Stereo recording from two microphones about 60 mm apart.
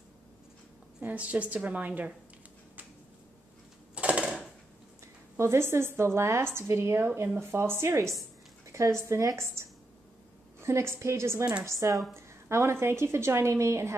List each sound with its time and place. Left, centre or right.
1.0 s a woman's voice: right
3.9 s a sound: centre
5.0 s a woman's voice: right
10.6 s a woman's voice: right
12.4 s a woman's voice: right